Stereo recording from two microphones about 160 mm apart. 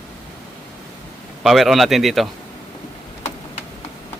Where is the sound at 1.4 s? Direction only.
Centre (ahead or behind).